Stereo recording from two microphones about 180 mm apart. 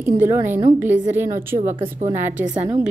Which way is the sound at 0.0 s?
15° right (ahead or behind).